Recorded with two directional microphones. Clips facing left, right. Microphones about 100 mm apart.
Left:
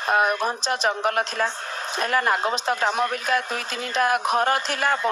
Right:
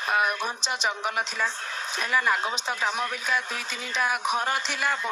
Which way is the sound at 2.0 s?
45° left (ahead or behind).